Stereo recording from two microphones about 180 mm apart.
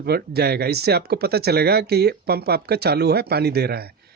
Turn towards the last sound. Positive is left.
turn(degrees=-60)  # may be behind; listen again after turning